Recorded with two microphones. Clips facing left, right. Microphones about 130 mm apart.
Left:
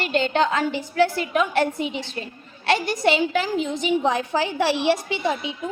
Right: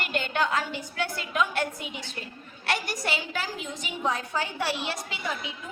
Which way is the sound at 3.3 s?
80° left.